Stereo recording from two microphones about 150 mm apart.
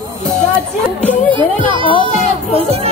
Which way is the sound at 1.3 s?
35° right (ahead or behind).